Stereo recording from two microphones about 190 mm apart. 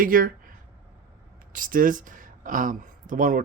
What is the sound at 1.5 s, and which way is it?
Speech, 45° right (ahead or behind).